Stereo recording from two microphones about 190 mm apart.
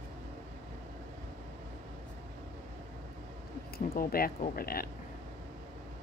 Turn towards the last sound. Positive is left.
turn(degrees=50)  # may be behind; listen again after turning